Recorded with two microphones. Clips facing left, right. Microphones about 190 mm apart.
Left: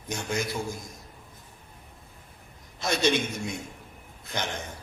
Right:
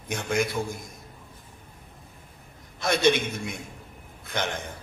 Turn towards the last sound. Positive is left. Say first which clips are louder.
# right 3 dB
turn(degrees=-55)  # may be behind; listen again after turning